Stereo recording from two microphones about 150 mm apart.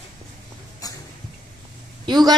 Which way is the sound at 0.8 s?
25° left (ahead or behind).